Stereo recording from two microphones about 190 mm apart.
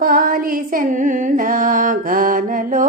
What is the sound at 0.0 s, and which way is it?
Music, 50° right (ahead or behind).